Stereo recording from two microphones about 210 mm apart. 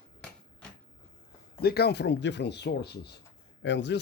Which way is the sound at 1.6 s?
50° left (ahead or behind).